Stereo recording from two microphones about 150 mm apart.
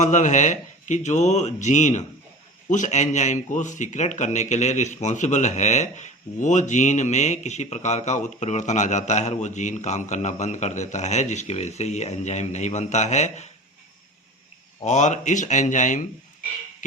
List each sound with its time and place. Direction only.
0.0 s speech: 55° left (ahead or behind)
14.8 s speech: 50° left (ahead or behind)